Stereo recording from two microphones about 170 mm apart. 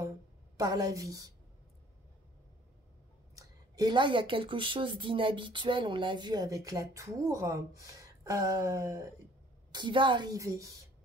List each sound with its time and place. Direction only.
0.6 s speech: 20° right (ahead or behind)
3.3 s speech: 20° right (ahead or behind)